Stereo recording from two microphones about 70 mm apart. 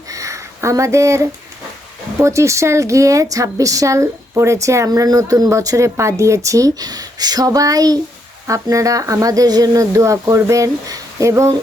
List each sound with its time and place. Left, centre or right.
0.1 s a sound: right
2.2 s speech: right
4.9 s speech: right
8.4 s speech: right
11.3 s speech: right